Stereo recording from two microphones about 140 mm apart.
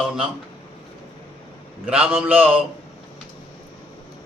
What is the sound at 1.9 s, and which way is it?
Speech, 5° right (ahead or behind).